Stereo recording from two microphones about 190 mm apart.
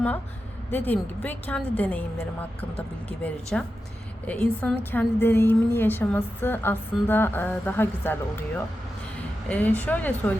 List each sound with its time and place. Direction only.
0.7 s a woman's voice: 10° left (ahead or behind)
3.5 s a woman's voice: 5° left (ahead or behind)